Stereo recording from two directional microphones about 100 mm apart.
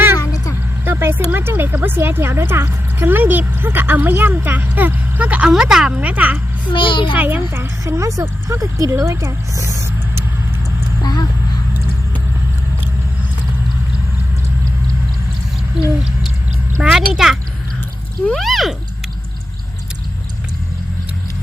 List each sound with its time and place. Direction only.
0.9 s a woman's voice: 20° right (ahead or behind)
6.7 s a child's voice: 55° left (ahead or behind)
7.2 s speech: 20° right (ahead or behind)
11.0 s a sound: 40° left (ahead or behind)
16.8 s a child's voice: 5° right (ahead or behind)